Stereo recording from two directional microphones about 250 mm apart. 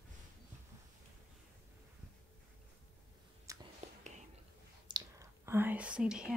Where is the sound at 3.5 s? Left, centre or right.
Centre.